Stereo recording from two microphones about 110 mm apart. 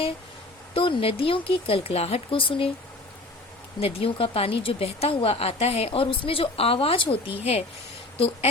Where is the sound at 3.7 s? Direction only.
60° left (ahead or behind).